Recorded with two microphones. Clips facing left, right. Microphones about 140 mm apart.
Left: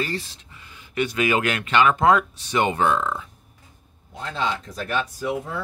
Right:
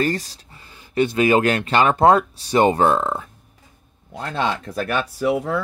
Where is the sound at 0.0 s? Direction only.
45° right (ahead or behind).